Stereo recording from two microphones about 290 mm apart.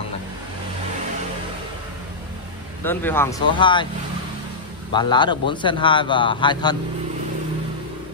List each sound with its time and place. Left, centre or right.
2.8 s a man's voice: centre
4.9 s a man's voice: centre